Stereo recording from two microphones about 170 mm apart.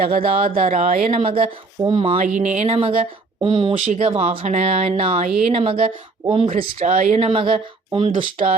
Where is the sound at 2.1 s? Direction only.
45° right (ahead or behind).